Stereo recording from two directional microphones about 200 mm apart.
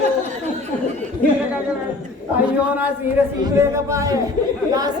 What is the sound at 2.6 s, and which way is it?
A woman's voice, 10° right (ahead or behind).